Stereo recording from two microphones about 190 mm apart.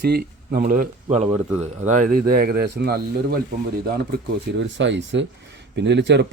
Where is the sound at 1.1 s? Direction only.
35° right (ahead or behind); by 3.4 s 55° right (ahead or behind).